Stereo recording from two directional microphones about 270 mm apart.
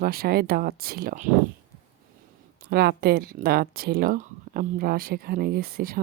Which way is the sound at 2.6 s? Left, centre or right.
Right.